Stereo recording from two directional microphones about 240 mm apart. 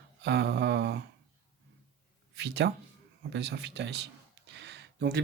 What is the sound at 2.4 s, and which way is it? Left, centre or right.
Speech, right.